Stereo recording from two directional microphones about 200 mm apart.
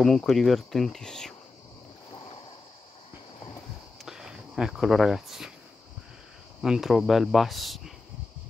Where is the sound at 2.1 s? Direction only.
25° left (ahead or behind).